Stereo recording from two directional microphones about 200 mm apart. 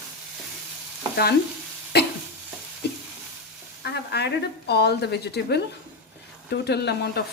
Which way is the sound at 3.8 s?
55° left (ahead or behind).